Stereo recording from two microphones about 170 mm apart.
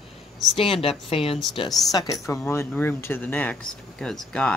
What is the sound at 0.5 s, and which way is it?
A woman's voice, 35° left (ahead or behind).